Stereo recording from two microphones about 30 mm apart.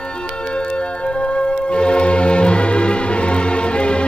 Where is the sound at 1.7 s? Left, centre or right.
Left.